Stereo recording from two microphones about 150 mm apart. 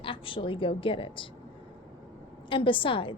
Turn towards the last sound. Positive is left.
turn(degrees=35)  # may be behind; listen again after turning